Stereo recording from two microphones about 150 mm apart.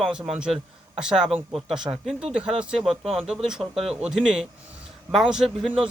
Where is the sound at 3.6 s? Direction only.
40° right (ahead or behind).